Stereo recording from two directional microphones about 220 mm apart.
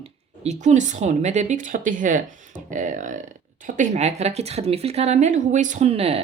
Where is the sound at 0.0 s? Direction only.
30° right (ahead or behind).